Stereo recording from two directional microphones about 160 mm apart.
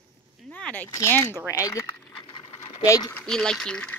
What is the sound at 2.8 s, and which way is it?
Speech, 20° left (ahead or behind).